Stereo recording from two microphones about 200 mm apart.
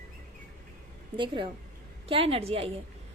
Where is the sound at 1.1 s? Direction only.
25° right (ahead or behind).